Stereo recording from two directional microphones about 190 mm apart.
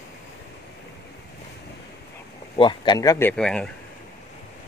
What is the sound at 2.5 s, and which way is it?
Speech, 25° left (ahead or behind).